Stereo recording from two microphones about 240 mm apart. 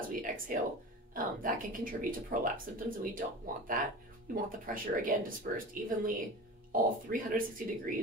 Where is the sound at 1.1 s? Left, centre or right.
Right.